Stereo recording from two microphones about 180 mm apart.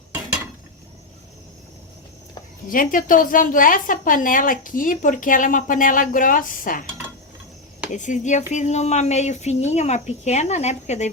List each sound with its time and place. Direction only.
2.6 s a woman's voice: 50° left (ahead or behind)
7.9 s a woman's voice: 45° left (ahead or behind)